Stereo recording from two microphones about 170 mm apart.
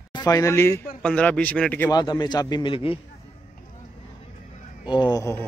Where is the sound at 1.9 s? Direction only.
25° left (ahead or behind).